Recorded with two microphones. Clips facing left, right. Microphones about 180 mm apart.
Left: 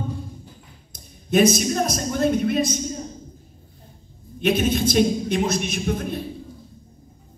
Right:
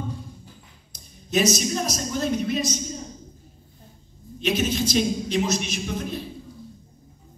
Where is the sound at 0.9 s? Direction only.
55° left (ahead or behind).